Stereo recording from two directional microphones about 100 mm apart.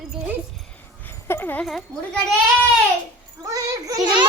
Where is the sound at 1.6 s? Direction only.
5° left (ahead or behind).